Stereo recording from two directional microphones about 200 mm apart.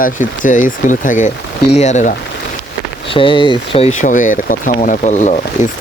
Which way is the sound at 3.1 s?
25° left (ahead or behind).